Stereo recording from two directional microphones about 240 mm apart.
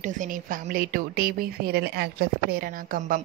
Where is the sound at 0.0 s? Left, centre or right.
Right.